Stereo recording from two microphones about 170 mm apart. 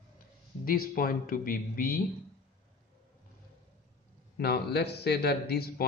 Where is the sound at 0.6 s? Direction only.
60° left (ahead or behind).